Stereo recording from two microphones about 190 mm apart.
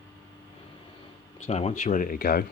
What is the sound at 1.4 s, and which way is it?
Speech, 35° left (ahead or behind).